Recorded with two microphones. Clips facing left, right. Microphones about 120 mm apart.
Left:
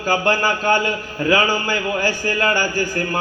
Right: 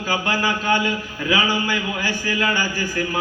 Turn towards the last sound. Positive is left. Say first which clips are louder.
# left 3 dB
turn(degrees=45)  # may be behind; listen again after turning